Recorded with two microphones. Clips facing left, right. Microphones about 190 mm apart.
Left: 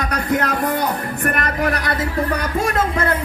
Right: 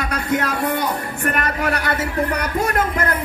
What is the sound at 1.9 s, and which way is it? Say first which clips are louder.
Speech: even; 30° left (ahead or behind).